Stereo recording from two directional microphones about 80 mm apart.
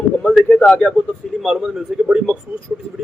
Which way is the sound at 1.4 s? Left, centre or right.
Centre.